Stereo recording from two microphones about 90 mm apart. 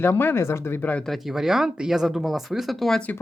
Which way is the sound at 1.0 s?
5° right (ahead or behind).